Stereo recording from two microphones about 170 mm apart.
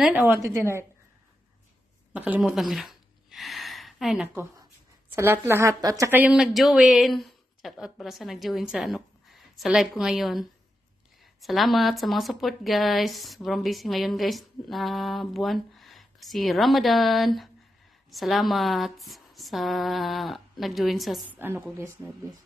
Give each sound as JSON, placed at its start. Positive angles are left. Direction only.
{"t": 0.0, "sound": "a woman's voice", "side_deg": -10}
{"t": 2.1, "sound": "a sound", "side_deg": -10}
{"t": 5.1, "sound": "a woman's voice", "side_deg": -15}
{"t": 21.4, "sound": "a woman's voice", "side_deg": -10}